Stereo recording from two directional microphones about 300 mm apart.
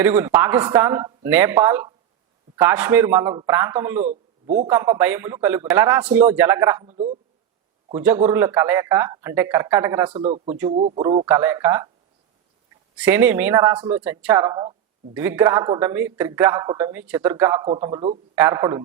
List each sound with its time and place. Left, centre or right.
0.0 s speech: centre
4.0 s a man's voice: right
4.7 s speech: centre
7.9 s speech: centre
10.2 s speech: right
13.0 s speech: centre